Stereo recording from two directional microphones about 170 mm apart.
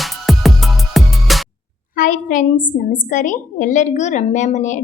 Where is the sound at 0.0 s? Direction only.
Centre (ahead or behind).